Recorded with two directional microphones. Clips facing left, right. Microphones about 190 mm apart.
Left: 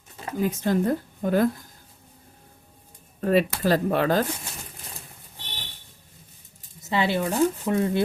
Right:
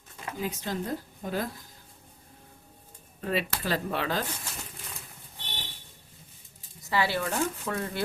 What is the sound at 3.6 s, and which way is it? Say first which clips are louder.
Speech: left 8 dB; 45° left (ahead or behind).